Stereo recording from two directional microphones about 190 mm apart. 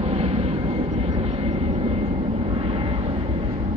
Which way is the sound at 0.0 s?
35° right (ahead or behind).